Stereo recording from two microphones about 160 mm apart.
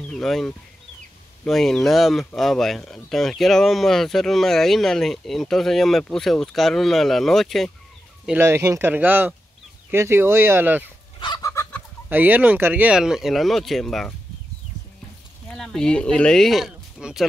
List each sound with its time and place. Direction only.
0.1 s speech: 5° left (ahead or behind)
8.3 s speech: 15° right (ahead or behind)
11.1 s chicken: 25° left (ahead or behind)
12.1 s speech: 10° right (ahead or behind)
15.5 s speech: 5° left (ahead or behind)